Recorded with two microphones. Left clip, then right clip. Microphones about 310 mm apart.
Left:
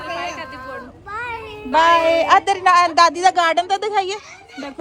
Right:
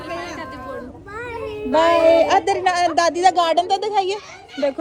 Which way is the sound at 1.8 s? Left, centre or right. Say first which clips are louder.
Even; left.